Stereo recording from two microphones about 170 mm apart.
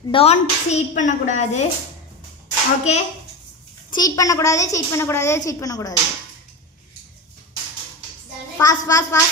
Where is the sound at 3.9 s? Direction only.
20° left (ahead or behind).